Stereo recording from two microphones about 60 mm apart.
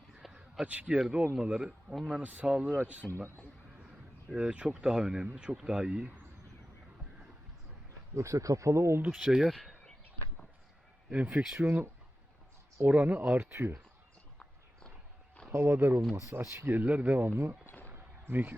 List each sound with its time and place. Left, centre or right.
0.1 s a sound: centre
0.6 s speech: right
2.2 s speech: right
4.4 s speech: centre
8.1 s speech: right
9.0 s speech: centre
11.1 s speech: right
13.3 s speech: right
14.3 s walk: centre
15.5 s speech: right
16.6 s speech: right
17.8 s a sound: right